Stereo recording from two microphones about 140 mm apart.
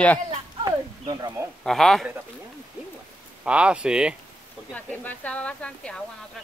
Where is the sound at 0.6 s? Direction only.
30° right (ahead or behind).